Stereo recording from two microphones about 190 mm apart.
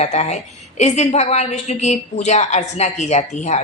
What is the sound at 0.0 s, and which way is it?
A woman's voice, 35° left (ahead or behind).